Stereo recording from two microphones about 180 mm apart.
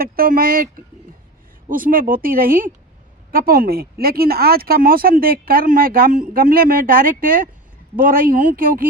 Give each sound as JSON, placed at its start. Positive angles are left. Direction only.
{"t": 0.0, "sound": "speech", "side_deg": -55}